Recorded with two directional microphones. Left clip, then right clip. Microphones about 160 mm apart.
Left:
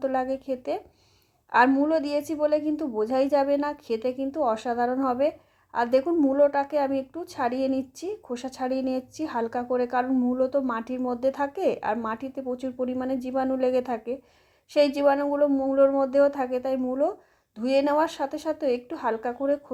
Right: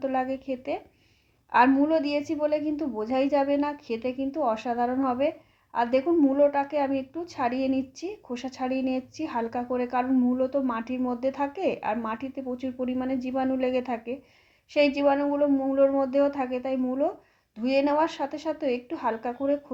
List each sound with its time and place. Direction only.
0.0 s a woman's voice: 45° left (ahead or behind)
10.2 s a woman's voice: 35° left (ahead or behind)
19.4 s speech: 30° left (ahead or behind)